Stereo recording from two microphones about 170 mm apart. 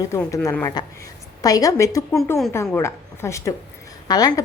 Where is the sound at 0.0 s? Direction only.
20° left (ahead or behind).